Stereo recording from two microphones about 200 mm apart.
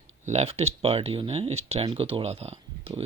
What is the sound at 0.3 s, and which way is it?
Speech, 30° right (ahead or behind).